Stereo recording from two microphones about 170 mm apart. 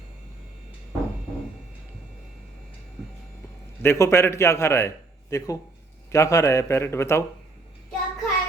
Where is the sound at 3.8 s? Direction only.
15° left (ahead or behind).